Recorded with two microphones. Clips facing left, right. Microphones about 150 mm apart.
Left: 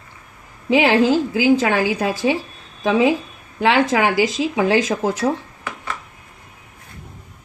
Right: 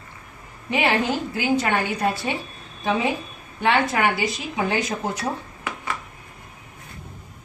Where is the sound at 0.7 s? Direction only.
90° left.